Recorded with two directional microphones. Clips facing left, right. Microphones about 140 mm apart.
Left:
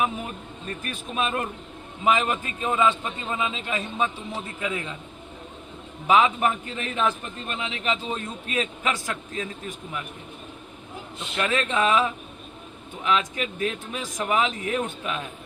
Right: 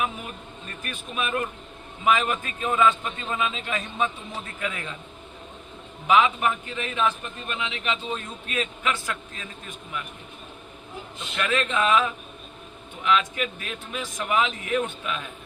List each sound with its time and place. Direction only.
0.9 s a man's voice: 30° left (ahead or behind)
6.1 s a man's voice: 35° left (ahead or behind)
11.3 s a man's voice: 30° left (ahead or behind)